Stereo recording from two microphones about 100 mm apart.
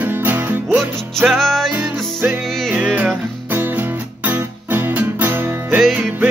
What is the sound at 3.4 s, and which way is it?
Music, 20° right (ahead or behind).